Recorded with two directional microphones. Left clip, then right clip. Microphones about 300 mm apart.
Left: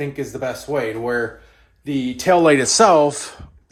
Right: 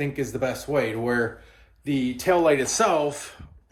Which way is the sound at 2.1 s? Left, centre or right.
Left.